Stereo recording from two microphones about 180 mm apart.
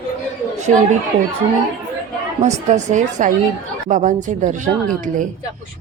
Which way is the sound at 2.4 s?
40° right (ahead or behind).